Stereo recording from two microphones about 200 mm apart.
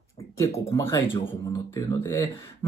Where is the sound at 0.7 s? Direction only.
15° left (ahead or behind).